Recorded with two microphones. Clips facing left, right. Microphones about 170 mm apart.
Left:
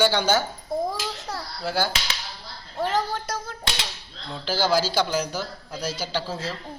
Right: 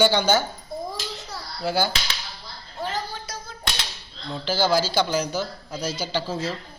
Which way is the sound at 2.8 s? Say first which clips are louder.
Left 5 dB; 75° left (ahead or behind).